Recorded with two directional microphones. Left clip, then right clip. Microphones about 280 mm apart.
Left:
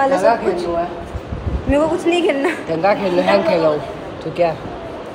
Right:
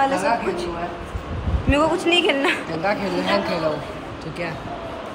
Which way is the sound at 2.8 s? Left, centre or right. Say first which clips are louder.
Left 7 dB; left.